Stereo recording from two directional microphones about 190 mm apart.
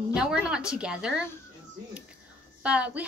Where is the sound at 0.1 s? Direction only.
5° right (ahead or behind).